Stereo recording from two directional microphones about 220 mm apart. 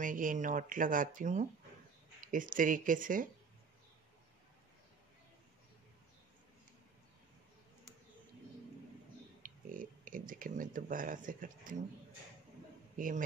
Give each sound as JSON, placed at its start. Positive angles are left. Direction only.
{"t": 0.0, "sound": "speech", "side_deg": -40}
{"t": 9.4, "sound": "speech", "side_deg": -40}
{"t": 12.9, "sound": "a man's voice", "side_deg": -35}